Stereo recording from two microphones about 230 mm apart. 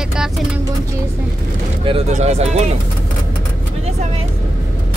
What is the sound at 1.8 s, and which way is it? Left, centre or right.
Speech, right.